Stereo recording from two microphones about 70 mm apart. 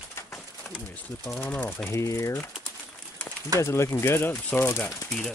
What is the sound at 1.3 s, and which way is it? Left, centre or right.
Speech, left.